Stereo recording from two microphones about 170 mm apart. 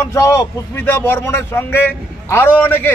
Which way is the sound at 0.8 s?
15° left (ahead or behind).